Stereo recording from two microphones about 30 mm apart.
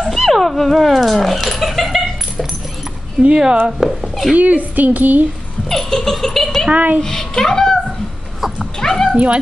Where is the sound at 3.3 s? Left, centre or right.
Right.